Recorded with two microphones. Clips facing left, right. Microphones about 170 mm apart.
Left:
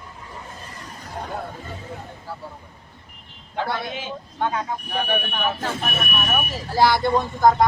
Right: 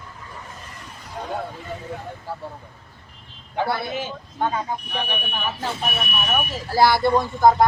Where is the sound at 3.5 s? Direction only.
10° right (ahead or behind).